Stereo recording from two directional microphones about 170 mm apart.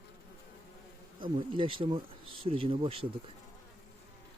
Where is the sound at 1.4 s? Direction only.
30° right (ahead or behind).